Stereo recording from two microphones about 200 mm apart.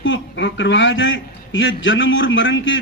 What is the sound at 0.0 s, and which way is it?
A man's voice, 65° left (ahead or behind).